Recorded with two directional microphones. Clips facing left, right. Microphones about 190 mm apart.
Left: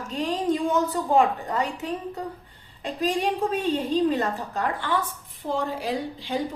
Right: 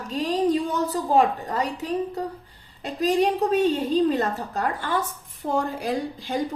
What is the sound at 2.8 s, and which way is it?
A woman's voice, 40° right (ahead or behind).